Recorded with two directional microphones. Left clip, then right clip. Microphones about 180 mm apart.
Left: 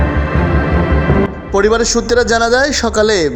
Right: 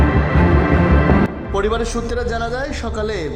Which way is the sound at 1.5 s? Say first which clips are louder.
Left 9 dB; 20° left (ahead or behind).